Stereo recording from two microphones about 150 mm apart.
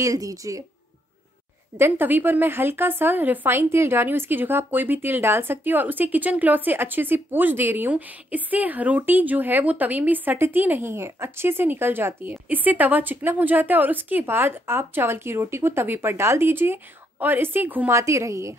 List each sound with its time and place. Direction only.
0.0 s speech: 20° right (ahead or behind)
1.8 s speech: 15° right (ahead or behind)